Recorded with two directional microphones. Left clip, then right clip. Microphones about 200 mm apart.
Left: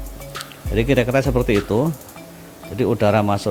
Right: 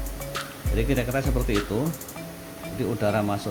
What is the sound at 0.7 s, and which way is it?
Speech, 45° left (ahead or behind).